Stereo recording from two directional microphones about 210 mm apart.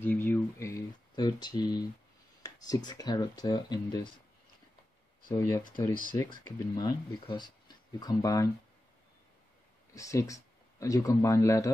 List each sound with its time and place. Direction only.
0.0 s a sound: 10° left (ahead or behind)
2.4 s speech: 20° left (ahead or behind)
5.3 s speech: 15° left (ahead or behind)
9.9 s speech: 15° left (ahead or behind)